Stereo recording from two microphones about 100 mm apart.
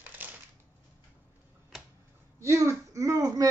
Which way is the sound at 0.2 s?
20° right (ahead or behind).